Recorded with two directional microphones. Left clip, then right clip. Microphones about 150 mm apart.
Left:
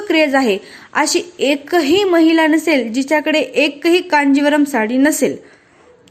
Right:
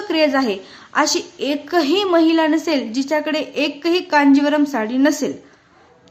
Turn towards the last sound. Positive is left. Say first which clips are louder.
# left 4 dB
turn(degrees=20)  # may be behind; listen again after turning